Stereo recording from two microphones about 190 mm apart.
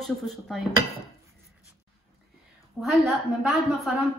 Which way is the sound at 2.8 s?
Centre (ahead or behind).